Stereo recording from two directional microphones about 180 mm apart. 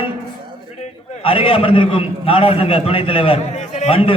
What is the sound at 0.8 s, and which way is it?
A man's voice, 35° left (ahead or behind).